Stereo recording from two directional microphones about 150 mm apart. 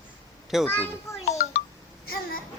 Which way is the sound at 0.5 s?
Centre (ahead or behind).